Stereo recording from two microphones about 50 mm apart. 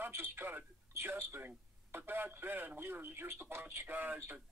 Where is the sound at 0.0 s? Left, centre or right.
Right.